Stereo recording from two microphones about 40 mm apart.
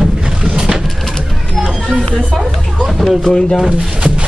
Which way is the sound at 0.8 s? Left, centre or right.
Centre.